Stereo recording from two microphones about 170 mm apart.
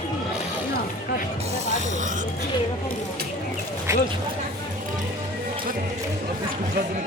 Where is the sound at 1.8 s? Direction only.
45° right (ahead or behind).